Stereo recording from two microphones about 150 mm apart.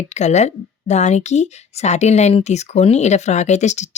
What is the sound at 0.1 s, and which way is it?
Speech, 50° left (ahead or behind).